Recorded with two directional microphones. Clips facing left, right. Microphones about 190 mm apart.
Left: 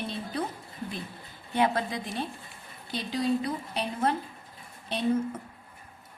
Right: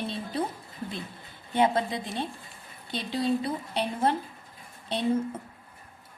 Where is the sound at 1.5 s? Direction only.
25° right (ahead or behind).